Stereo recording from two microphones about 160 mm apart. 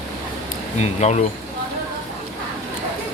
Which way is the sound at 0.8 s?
45° left (ahead or behind).